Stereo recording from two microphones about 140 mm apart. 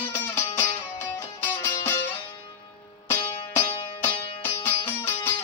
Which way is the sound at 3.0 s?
15° left (ahead or behind).